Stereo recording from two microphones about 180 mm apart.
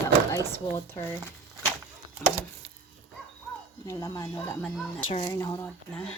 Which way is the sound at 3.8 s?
15° left (ahead or behind).